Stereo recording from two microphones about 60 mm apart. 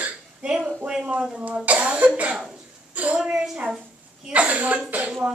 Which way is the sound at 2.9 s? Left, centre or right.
Right.